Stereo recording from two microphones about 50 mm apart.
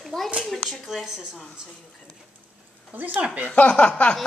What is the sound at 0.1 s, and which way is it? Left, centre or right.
Speech, centre.